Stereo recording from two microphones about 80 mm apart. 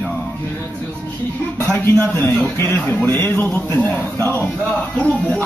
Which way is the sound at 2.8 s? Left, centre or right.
Left.